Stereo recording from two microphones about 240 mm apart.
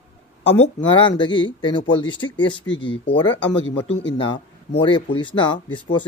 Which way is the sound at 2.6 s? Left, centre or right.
Left.